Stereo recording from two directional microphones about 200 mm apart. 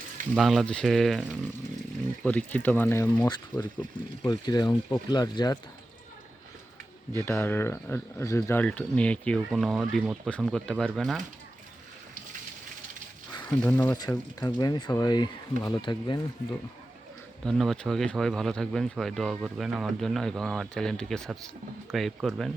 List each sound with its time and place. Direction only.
0.3 s speech: centre (ahead or behind)
4.2 s speech: 20° left (ahead or behind)
7.2 s speech: 10° left (ahead or behind)
13.5 s speech: 10° left (ahead or behind); by 16.2 s 25° left (ahead or behind)
17.4 s speech: centre (ahead or behind)